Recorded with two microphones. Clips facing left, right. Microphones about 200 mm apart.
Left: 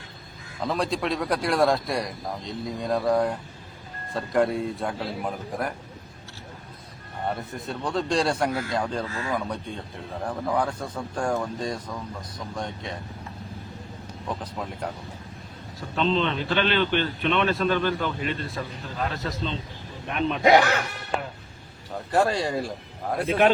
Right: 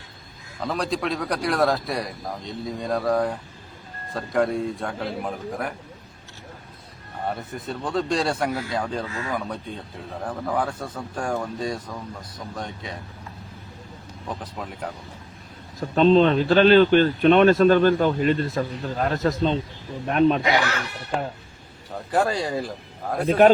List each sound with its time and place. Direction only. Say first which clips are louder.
0.6 s a man's voice: even; centre (ahead or behind)
7.5 s a man's voice: right 4 dB; centre (ahead or behind)
9.0 s speech: right 1 dB; 30° left (ahead or behind)
10.2 s a man's voice: even; centre (ahead or behind)
16.0 s a man's voice: right 8 dB; 45° right (ahead or behind)
20.4 s speech: left 5 dB; 50° left (ahead or behind)
22.1 s a man's voice: even; centre (ahead or behind)
23.2 s speech: right 5 dB; 45° right (ahead or behind)